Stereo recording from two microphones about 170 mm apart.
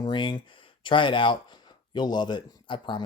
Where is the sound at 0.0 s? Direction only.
25° left (ahead or behind).